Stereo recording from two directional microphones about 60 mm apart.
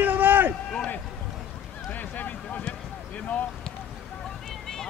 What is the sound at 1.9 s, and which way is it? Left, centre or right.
Vehicle, left.